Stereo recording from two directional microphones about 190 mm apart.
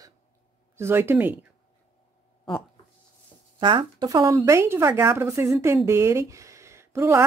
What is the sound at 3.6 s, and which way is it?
Speech, 25° right (ahead or behind).